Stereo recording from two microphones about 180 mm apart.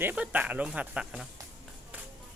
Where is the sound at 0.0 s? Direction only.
10° right (ahead or behind).